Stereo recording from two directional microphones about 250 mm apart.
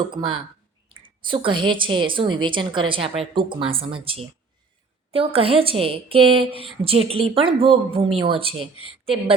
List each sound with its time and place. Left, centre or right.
0.1 s a woman's voice: centre